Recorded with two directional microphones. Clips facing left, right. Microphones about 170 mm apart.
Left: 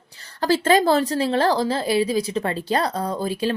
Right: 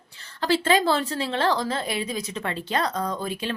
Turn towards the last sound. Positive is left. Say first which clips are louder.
# left 5 dB
turn(degrees=35)  # may be behind; listen again after turning